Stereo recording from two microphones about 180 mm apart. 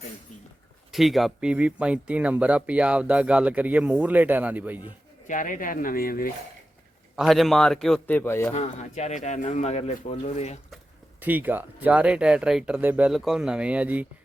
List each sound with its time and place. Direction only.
0.9 s speech: centre (ahead or behind)
5.3 s speech: 45° left (ahead or behind)
7.2 s a man's voice: centre (ahead or behind)
8.5 s speech: 40° left (ahead or behind)
11.2 s speech: 10° right (ahead or behind)